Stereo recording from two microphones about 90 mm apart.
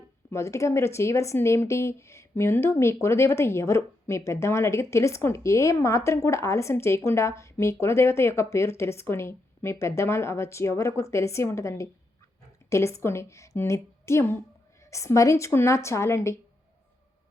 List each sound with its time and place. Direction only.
0.3 s speech: 30° left (ahead or behind)